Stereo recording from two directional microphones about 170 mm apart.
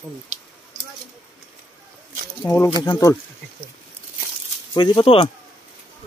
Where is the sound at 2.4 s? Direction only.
10° left (ahead or behind).